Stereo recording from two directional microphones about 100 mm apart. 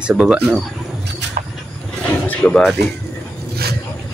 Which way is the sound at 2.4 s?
5° left (ahead or behind).